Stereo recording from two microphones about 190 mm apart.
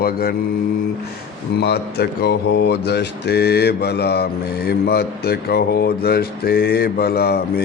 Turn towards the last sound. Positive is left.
turn(degrees=55)  # may be behind; listen again after turning